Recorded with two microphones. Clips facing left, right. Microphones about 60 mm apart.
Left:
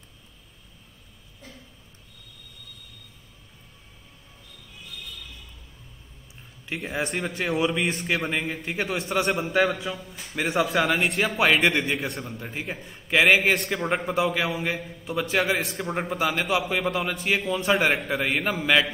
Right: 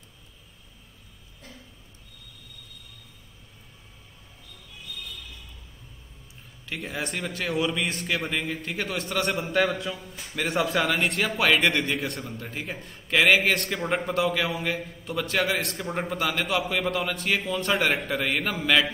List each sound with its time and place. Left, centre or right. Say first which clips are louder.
6.7 s a man's voice: left 2 dB; centre
7.4 s a man's voice: left 2 dB; centre
8.6 s a man's voice: left 2 dB; centre
9.5 s a man's voice: left 1 dB; centre